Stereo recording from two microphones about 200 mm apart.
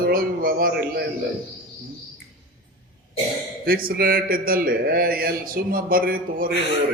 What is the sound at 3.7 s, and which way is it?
A man's voice, 50° right (ahead or behind).